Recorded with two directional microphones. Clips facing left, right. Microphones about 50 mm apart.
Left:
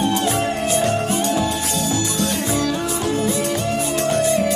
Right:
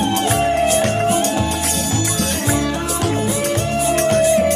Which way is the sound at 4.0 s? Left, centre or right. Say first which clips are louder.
Right 4 dB; right.